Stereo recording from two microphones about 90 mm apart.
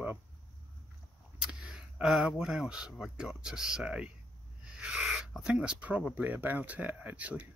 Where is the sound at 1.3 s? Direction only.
10° right (ahead or behind).